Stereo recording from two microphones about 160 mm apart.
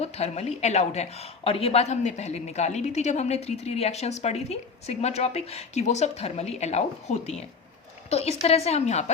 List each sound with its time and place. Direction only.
0.0 s a woman's voice: 40° left (ahead or behind)